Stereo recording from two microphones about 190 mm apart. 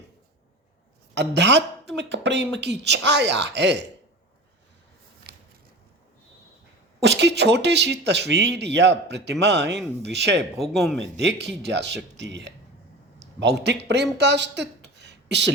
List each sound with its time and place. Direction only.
1.1 s speech: 65° right (ahead or behind)
7.0 s speech: 65° right (ahead or behind)
10.6 s speech: centre (ahead or behind)
11.0 s speech: 65° right (ahead or behind)